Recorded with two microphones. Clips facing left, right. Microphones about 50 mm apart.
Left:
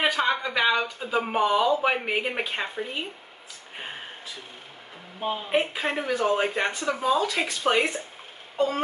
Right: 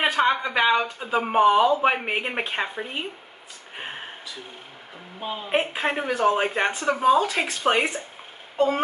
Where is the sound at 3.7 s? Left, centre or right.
Centre.